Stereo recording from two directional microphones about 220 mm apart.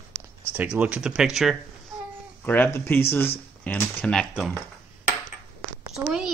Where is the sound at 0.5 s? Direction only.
5° right (ahead or behind).